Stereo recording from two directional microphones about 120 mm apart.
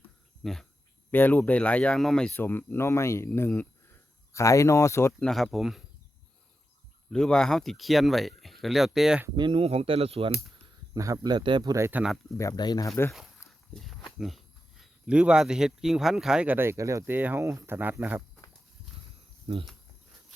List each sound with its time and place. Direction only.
0.4 s speech: centre (ahead or behind)
1.1 s speech: 15° left (ahead or behind)
2.3 s speech: 20° left (ahead or behind)
5.2 s speech: centre (ahead or behind)
7.1 s speech: 5° left (ahead or behind)
9.3 s speech: 40° right (ahead or behind)
10.9 s speech: 30° right (ahead or behind)
11.8 s speech: 15° right (ahead or behind)
12.4 s speech: 30° left (ahead or behind)
14.2 s speech: centre (ahead or behind); by 18.2 s 15° right (ahead or behind)
19.5 s speech: 55° right (ahead or behind)